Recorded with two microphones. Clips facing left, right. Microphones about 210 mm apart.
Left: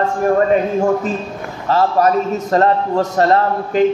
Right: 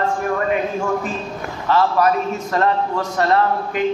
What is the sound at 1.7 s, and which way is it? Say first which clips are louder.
A man's voice: left 2 dB; 35° left (ahead or behind).